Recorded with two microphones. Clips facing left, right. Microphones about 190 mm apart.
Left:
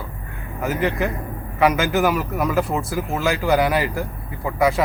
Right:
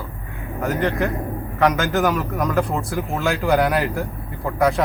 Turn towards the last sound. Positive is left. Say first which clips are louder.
# even
turn(degrees=0)  # may be behind; listen again after turning